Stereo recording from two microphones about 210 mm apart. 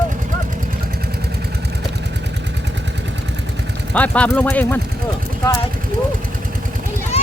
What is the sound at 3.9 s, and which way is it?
Speech, 5° left (ahead or behind).